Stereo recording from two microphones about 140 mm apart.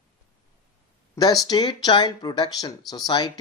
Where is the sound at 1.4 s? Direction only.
30° left (ahead or behind).